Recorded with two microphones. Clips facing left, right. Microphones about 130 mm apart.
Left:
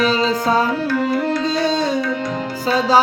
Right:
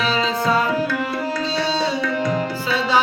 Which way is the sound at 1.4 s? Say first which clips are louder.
Left 3 dB; 50° left (ahead or behind).